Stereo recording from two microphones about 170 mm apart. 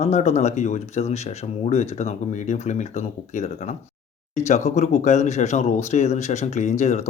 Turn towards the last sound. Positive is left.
turn(degrees=40)  # may be behind; listen again after turning